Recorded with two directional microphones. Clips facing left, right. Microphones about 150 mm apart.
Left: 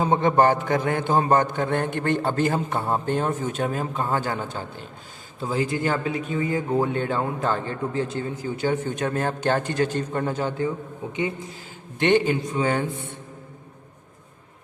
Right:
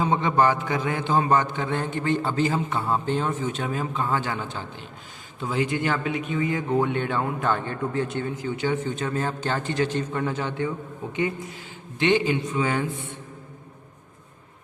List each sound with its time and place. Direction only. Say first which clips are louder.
0.0 s a man's voice: left 2 dB; 45° left (ahead or behind)
11.9 s a man's voice: left 2 dB; 50° left (ahead or behind)